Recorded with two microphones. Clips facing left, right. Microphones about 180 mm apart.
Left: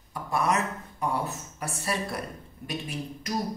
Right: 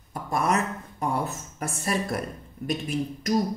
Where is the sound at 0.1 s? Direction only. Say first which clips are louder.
Right 1 dB; 45° right (ahead or behind).